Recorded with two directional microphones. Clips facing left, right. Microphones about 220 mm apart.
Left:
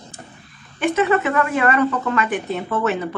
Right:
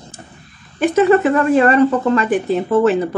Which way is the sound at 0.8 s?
35° right (ahead or behind).